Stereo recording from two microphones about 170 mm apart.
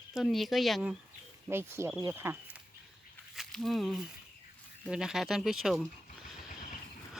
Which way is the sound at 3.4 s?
Centre (ahead or behind).